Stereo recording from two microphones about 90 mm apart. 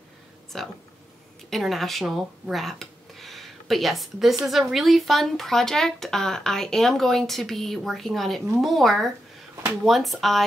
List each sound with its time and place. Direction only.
0.5 s speech: 5° left (ahead or behind)